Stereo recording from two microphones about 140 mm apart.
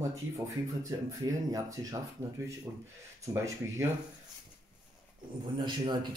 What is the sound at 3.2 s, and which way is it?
Speech, 20° right (ahead or behind).